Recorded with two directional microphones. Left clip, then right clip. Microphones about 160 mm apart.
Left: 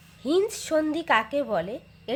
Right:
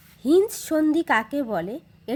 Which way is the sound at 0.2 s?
45° right (ahead or behind).